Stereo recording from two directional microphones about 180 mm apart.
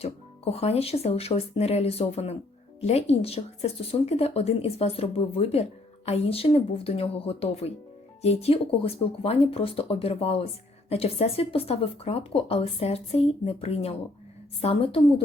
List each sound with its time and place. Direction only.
0.5 s speech: 35° left (ahead or behind)